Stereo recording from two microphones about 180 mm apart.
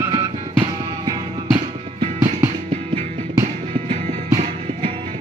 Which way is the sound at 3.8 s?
30° right (ahead or behind).